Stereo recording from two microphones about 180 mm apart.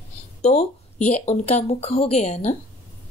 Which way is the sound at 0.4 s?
35° left (ahead or behind).